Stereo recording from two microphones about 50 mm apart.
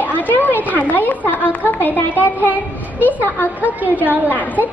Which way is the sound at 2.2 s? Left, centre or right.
Right.